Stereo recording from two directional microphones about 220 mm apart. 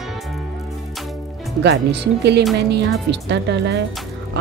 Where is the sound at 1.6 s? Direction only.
50° right (ahead or behind).